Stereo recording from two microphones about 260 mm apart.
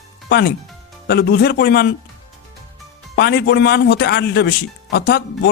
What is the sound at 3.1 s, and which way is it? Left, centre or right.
Speech, left.